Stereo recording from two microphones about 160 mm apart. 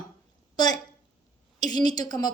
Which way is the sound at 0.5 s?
25° left (ahead or behind).